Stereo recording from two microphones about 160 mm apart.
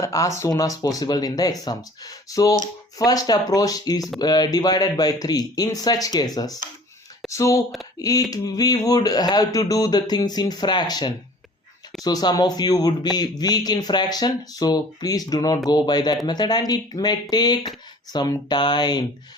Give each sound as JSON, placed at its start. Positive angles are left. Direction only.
{"t": 0.0, "sound": "a man's voice", "side_deg": 20}